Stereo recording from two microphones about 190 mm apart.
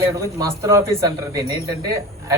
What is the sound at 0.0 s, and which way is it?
Speech, 15° right (ahead or behind).